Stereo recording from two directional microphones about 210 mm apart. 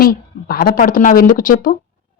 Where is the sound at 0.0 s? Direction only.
45° left (ahead or behind).